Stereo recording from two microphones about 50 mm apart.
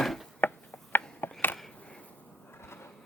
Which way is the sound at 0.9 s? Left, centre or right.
Left.